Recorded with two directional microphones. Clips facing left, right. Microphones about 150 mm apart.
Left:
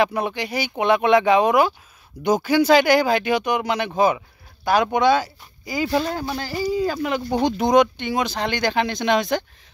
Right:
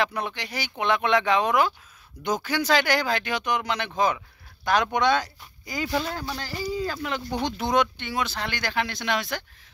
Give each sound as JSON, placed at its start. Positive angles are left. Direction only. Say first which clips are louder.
{"t": 0.0, "sound": "speech", "louder": "left 6 dB", "side_deg": 10}